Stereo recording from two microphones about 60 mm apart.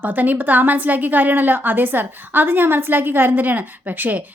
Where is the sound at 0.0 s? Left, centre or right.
Right.